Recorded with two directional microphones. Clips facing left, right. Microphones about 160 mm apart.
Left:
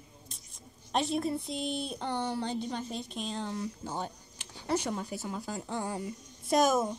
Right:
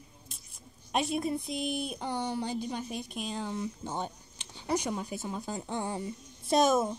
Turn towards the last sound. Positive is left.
turn(degrees=-25)  # may be behind; listen again after turning